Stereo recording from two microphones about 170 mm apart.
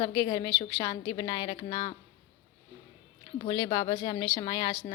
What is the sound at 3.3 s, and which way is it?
Speech, 25° left (ahead or behind).